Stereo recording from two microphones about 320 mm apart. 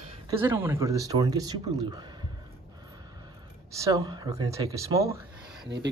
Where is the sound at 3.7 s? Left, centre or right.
Centre.